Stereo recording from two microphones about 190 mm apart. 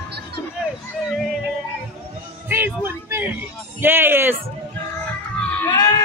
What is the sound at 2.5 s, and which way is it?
Music, 10° right (ahead or behind).